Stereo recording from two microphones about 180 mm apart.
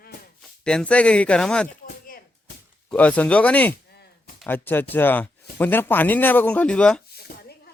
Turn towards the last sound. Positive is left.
turn(degrees=50)  # may be behind; listen again after turning